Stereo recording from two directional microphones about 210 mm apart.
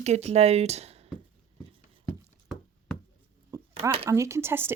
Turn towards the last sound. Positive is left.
turn(degrees=-10)  # may be behind; listen again after turning